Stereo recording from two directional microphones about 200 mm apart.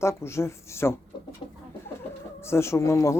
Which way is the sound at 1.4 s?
25° left (ahead or behind).